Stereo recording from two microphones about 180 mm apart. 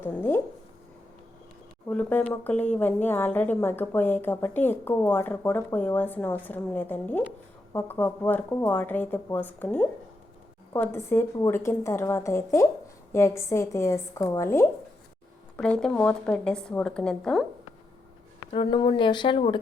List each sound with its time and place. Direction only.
0.0 s a woman's voice: 10° left (ahead or behind)
1.9 s a woman's voice: 10° left (ahead or behind)
18.5 s speech: 30° left (ahead or behind)